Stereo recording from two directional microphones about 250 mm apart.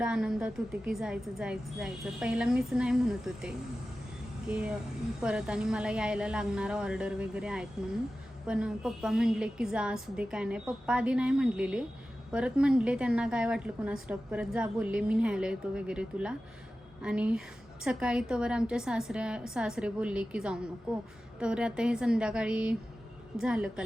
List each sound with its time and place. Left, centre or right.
0.0 s a woman's voice: centre